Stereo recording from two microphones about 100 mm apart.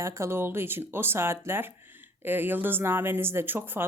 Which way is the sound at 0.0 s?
30° right (ahead or behind).